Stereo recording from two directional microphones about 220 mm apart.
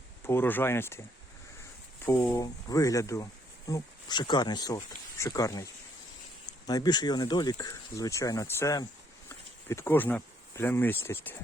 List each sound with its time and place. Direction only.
0.3 s speech: 10° left (ahead or behind)
2.0 s speech: 10° left (ahead or behind)
6.7 s speech: 20° left (ahead or behind)